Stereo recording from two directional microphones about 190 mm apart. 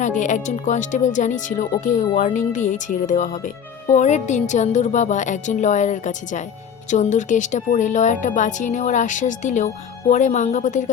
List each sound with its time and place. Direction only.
0.0 s speech: 40° left (ahead or behind)